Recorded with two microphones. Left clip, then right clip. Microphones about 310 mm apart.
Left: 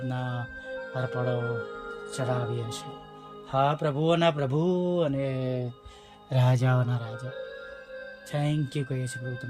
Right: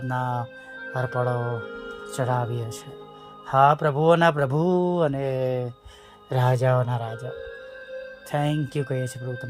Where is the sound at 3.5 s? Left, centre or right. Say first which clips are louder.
Right 7 dB; centre.